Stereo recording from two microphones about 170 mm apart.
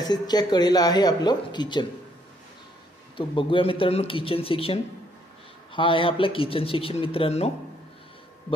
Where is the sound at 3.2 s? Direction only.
30° left (ahead or behind).